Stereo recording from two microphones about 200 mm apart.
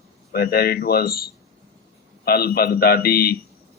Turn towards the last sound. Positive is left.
turn(degrees=50)  # may be behind; listen again after turning